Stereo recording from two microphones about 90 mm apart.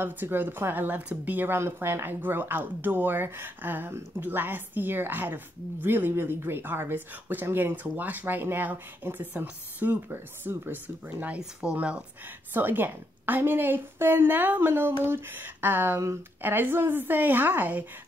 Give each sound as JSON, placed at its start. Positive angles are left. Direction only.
{"t": 0.0, "sound": "speech", "side_deg": -20}